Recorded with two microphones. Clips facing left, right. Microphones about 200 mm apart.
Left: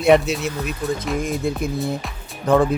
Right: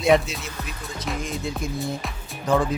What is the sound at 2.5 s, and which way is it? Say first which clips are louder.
Speech: left 5 dB; 60° left (ahead or behind).